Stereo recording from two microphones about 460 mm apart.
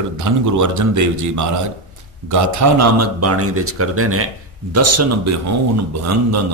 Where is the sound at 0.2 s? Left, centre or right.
Right.